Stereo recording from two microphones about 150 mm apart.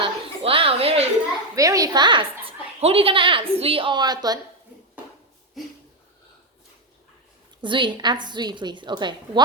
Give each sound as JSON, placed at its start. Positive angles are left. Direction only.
{"t": 0.0, "sound": "a sound", "side_deg": -35}
{"t": 1.5, "sound": "a woman's voice", "side_deg": -20}
{"t": 7.6, "sound": "a woman's voice", "side_deg": -30}